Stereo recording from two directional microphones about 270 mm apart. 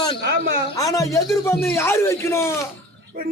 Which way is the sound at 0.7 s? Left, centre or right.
Centre.